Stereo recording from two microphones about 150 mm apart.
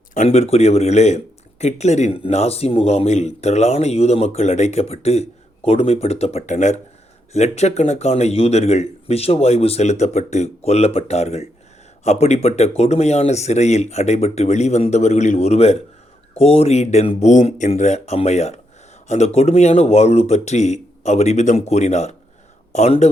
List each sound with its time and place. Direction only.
0.3 s speech: 45° left (ahead or behind)